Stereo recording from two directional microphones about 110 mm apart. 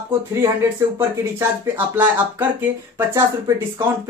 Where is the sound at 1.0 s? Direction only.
20° right (ahead or behind).